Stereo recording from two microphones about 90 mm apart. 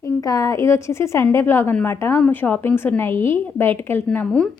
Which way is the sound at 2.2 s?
20° left (ahead or behind).